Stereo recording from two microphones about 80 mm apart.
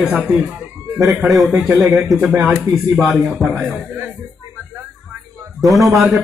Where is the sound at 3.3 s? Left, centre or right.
Centre.